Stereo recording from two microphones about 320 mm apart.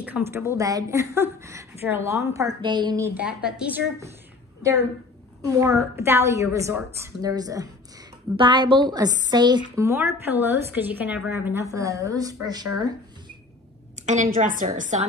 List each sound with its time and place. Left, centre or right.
0.0 s a woman's voice: centre
5.4 s a woman's voice: centre
14.0 s a woman's voice: right